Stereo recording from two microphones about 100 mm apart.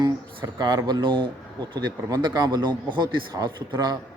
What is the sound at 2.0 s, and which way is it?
Speech, 40° right (ahead or behind).